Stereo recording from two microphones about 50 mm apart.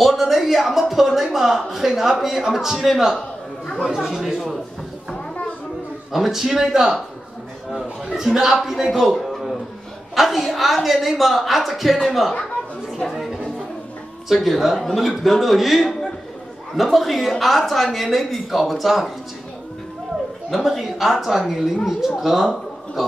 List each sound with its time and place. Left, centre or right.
0.0 s a man's voice: centre
3.2 s a sound: centre
3.8 s a woman's voice: centre
6.1 s a man's voice: centre
12.9 s a sound: centre
14.3 s a woman's voice: centre
20.4 s a woman's voice: centre